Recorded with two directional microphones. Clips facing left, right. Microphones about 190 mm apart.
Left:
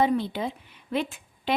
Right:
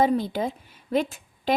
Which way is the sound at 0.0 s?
40° right (ahead or behind).